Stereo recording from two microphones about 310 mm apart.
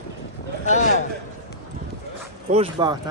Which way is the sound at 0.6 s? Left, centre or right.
Left.